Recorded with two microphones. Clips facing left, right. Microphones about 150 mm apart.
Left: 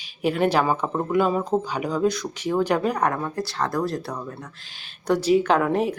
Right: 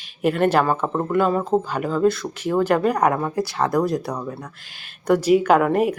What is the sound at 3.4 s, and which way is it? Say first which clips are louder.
Speech: right 5 dB; 20° right (ahead or behind).